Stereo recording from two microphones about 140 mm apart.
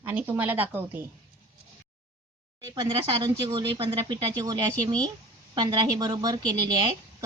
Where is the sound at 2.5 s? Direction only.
30° right (ahead or behind).